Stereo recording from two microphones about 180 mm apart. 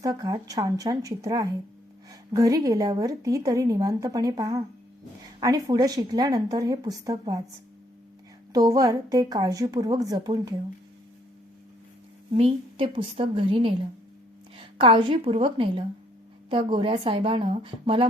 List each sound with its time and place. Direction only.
0.0 s speech: 20° right (ahead or behind)
8.5 s speech: 20° right (ahead or behind)
12.3 s a woman's voice: 35° right (ahead or behind)